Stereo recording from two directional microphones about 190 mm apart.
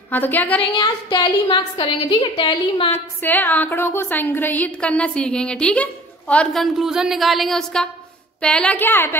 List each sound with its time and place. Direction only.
0.1 s a woman's voice: 10° left (ahead or behind)
0.7 s a woman's voice: 25° left (ahead or behind)
3.2 s a woman's voice: 10° left (ahead or behind)